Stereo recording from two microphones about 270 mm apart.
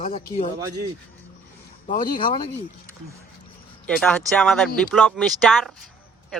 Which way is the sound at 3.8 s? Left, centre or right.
Centre.